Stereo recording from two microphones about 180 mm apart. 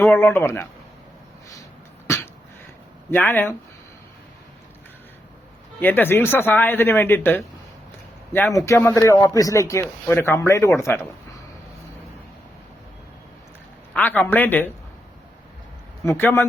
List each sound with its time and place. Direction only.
0.0 s speech: 10° left (ahead or behind)
2.1 s a sound: 15° left (ahead or behind)
3.1 s speech: 10° left (ahead or behind)
5.8 s speech: 10° left (ahead or behind)
8.5 s speech: 15° left (ahead or behind)
13.9 s speech: 10° left (ahead or behind)
16.0 s speech: 15° left (ahead or behind)